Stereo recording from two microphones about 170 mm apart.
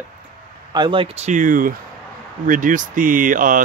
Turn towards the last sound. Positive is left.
turn(degrees=-50)  # may be behind; listen again after turning